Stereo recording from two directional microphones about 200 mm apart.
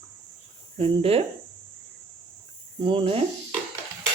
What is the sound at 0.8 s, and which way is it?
Speech, 30° right (ahead or behind).